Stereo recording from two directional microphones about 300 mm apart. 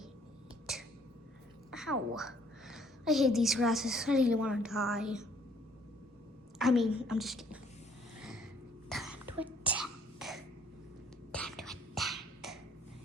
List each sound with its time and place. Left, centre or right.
0.7 s a sound: centre
1.7 s a woman's voice: centre
6.6 s a woman's voice: centre
8.2 s a sound: centre
8.9 s throat clearing: centre
11.3 s beatboxing: centre